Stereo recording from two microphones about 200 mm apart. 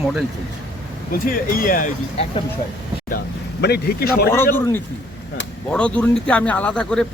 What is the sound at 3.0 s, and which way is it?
Speech, 50° left (ahead or behind).